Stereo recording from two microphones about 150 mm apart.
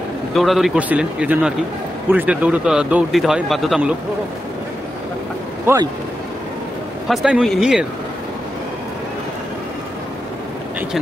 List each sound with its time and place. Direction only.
0.3 s speech: centre (ahead or behind)
7.1 s speech: 5° right (ahead or behind)